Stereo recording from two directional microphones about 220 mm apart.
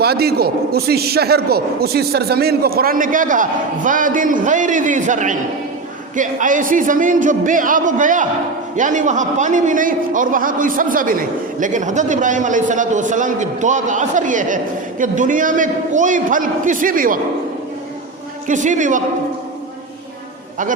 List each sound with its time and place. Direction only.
0.0 s a man's voice: 45° right (ahead or behind)
18.4 s a man's voice: 35° right (ahead or behind)